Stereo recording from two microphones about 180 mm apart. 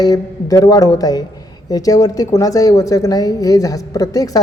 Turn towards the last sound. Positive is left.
turn(degrees=20)  # may be behind; listen again after turning